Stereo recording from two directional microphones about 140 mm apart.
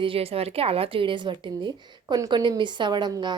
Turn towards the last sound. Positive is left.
turn(degrees=-30)  # may be behind; listen again after turning